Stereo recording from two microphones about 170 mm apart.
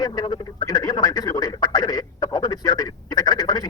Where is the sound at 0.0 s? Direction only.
25° left (ahead or behind).